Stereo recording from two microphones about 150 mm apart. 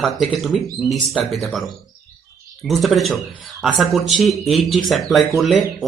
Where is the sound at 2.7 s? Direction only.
Centre (ahead or behind).